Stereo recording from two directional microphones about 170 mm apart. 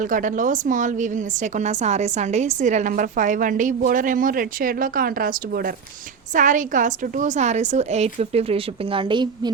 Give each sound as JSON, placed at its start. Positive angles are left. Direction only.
{"t": 0.0, "sound": "a woman's voice", "side_deg": -50}
{"t": 6.3, "sound": "a woman's voice", "side_deg": -50}